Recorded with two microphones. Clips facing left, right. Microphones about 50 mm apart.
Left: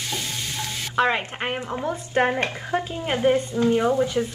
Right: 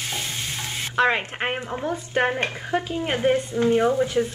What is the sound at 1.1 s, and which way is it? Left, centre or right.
Speech, centre.